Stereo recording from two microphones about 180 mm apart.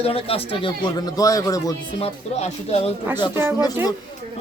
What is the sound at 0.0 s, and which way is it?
Speech, 30° left (ahead or behind).